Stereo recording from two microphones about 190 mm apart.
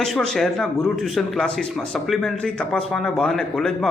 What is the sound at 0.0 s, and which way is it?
A man's voice, 5° left (ahead or behind).